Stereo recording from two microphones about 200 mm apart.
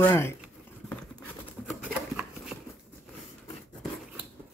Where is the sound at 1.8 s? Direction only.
5° right (ahead or behind).